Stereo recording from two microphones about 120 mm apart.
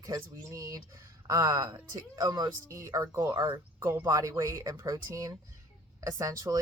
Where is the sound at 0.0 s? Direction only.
30° right (ahead or behind).